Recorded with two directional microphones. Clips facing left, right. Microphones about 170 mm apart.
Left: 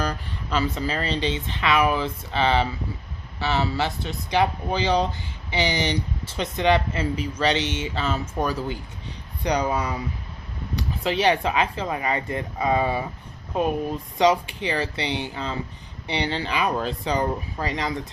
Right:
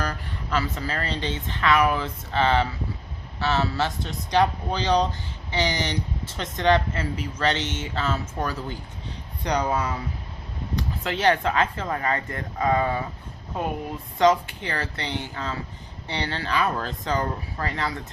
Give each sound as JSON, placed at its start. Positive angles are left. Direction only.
{"t": 0.0, "sound": "speech", "side_deg": 15}
{"t": 14.2, "sound": "speech", "side_deg": 15}